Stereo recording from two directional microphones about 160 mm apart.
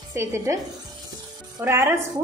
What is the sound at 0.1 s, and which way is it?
Speech, 15° right (ahead or behind).